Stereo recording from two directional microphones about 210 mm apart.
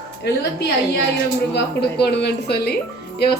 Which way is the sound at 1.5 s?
50° left (ahead or behind).